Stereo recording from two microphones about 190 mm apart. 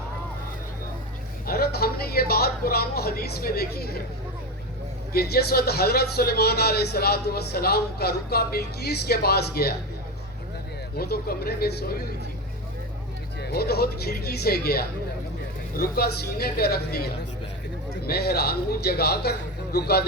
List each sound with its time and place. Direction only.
1.5 s speech: 55° left (ahead or behind)
5.1 s speech: 55° left (ahead or behind)
10.9 s speech: 55° left (ahead or behind)
13.4 s speech: 55° left (ahead or behind)